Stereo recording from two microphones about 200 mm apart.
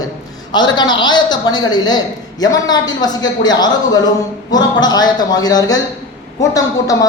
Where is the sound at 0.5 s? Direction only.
20° left (ahead or behind).